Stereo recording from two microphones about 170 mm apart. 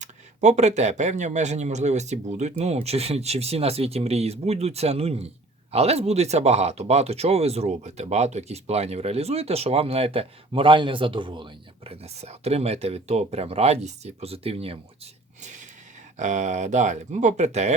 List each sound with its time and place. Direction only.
0.0 s speech: 45° right (ahead or behind)
15.4 s snort: 45° right (ahead or behind)
16.1 s speech: 45° right (ahead or behind)